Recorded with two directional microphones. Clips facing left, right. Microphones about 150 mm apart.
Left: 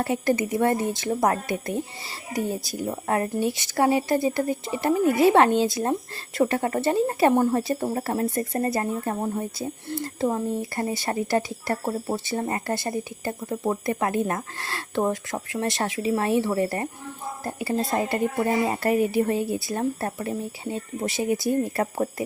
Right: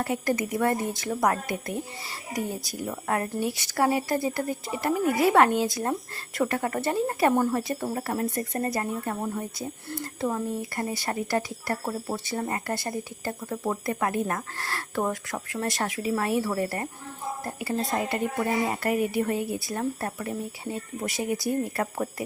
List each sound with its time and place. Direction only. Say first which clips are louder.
0.0 s speech: left 3 dB; 25° left (ahead or behind)